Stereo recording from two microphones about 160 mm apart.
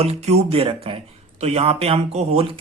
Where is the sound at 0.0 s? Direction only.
40° right (ahead or behind).